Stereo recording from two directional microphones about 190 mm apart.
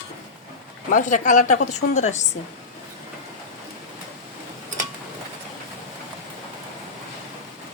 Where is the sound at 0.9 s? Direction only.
40° left (ahead or behind).